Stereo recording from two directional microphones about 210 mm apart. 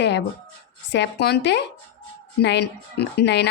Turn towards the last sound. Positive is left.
turn(degrees=55)  # may be behind; listen again after turning